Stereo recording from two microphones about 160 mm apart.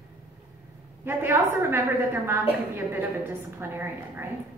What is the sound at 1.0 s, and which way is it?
A woman's voice, 15° right (ahead or behind).